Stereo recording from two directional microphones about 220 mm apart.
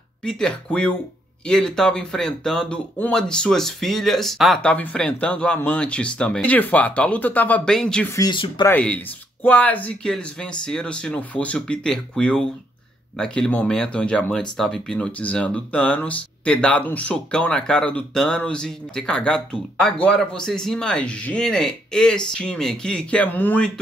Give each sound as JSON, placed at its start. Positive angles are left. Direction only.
{"t": 0.2, "sound": "speech", "side_deg": 5}
{"t": 8.7, "sound": "speech", "side_deg": 5}